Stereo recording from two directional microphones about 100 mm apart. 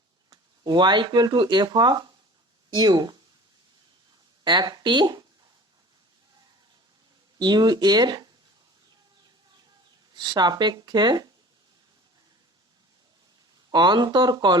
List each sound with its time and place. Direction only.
0.3 s speech: 45° right (ahead or behind)
4.4 s speech: 45° right (ahead or behind)
7.3 s speech: 45° right (ahead or behind)
10.2 s speech: 45° right (ahead or behind)
13.7 s speech: 45° right (ahead or behind)